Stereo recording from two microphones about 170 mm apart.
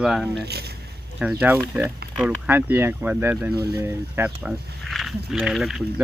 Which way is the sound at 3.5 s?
70° right (ahead or behind).